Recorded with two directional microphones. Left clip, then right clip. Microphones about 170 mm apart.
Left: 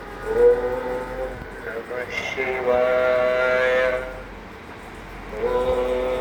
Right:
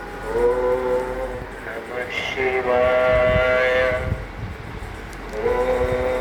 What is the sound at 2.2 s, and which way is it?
Train, 25° left (ahead or behind).